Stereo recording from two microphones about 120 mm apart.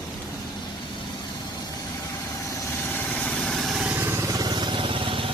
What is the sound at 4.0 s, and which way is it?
Vehicle, 20° right (ahead or behind).